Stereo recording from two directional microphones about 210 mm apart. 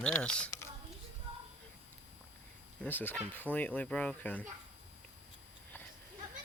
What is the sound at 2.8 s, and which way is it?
Speech, 10° left (ahead or behind).